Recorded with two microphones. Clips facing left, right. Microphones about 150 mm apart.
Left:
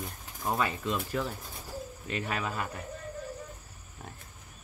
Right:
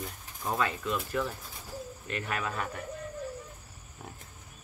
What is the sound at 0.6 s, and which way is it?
Speech, 20° left (ahead or behind).